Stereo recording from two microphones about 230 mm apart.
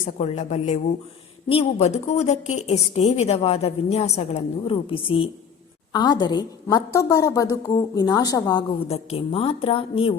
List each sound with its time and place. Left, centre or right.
0.0 s a woman's voice: left